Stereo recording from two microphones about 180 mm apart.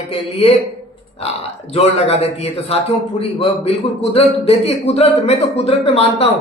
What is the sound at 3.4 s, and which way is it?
A man's voice, 35° left (ahead or behind).